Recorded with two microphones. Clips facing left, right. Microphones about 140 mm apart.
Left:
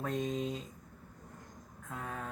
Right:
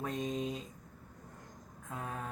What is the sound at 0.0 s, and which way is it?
Speech, 20° right (ahead or behind).